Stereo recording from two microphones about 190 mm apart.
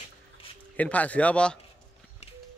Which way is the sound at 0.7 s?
10° left (ahead or behind).